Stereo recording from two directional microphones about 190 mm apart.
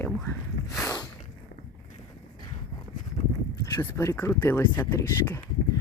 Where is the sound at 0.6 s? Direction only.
75° left (ahead or behind).